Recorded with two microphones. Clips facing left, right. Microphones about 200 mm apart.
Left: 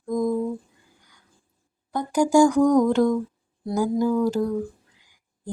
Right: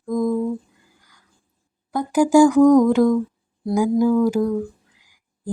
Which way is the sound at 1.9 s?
5° right (ahead or behind).